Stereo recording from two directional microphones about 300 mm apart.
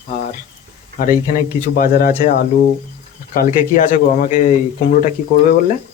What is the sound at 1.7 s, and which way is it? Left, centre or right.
Speech, left.